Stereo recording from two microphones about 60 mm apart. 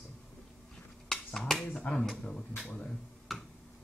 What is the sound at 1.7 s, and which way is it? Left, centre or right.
Speech, centre.